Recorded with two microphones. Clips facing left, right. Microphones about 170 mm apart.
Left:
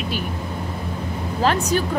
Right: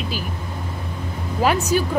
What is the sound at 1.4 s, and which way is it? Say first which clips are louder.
Speech: right 1 dB; 10° right (ahead or behind).